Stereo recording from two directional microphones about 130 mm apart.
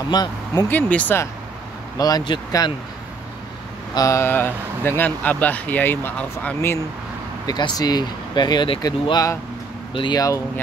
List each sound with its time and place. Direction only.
0.1 s speech: 30° left (ahead or behind)
0.7 s speech: 10° left (ahead or behind)
2.0 s speech: 30° left (ahead or behind)
3.9 s speech: 25° left (ahead or behind)
7.4 s speech: 30° left (ahead or behind)